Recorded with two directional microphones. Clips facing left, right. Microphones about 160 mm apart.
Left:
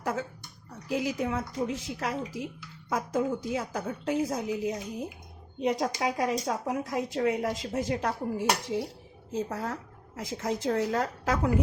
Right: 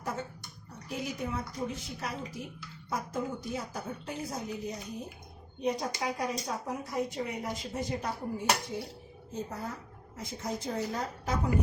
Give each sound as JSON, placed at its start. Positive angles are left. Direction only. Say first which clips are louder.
{"t": 0.9, "sound": "a woman's voice", "louder": "left 6 dB", "side_deg": 90}